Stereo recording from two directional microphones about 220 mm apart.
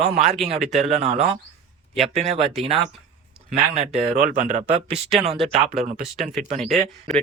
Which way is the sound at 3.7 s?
30° right (ahead or behind).